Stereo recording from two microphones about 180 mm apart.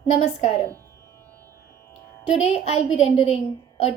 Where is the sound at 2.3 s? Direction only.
35° left (ahead or behind).